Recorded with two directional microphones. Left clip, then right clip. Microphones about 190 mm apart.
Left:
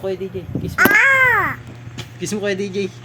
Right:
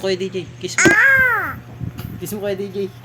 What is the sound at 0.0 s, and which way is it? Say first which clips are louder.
Speech: right 3 dB; 15° right (ahead or behind).